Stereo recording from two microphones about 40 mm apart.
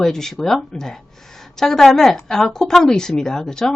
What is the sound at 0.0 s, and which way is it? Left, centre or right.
A woman's voice, centre.